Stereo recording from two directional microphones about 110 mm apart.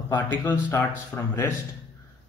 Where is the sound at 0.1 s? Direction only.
20° left (ahead or behind).